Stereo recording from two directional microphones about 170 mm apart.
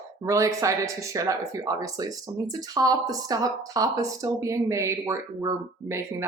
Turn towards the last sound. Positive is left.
turn(degrees=-15)  # may be behind; listen again after turning